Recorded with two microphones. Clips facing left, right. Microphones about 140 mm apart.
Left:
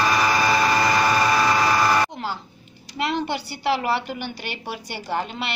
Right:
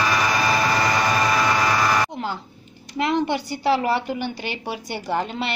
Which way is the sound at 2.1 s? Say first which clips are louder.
Right 2 dB; 20° right (ahead or behind).